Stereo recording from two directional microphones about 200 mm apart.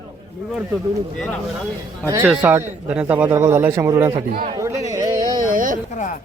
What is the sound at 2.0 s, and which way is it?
Speech, 15° right (ahead or behind).